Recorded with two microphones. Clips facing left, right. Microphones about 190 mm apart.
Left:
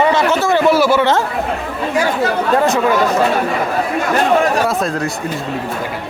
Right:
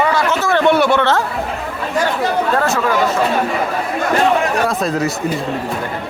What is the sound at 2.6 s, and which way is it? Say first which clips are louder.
Speech: left 3 dB; 15° left (ahead or behind).